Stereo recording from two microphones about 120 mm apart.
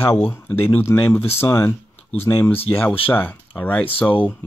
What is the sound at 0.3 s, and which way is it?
Speech, 20° left (ahead or behind).